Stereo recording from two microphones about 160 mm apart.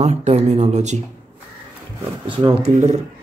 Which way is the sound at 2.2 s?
30° right (ahead or behind).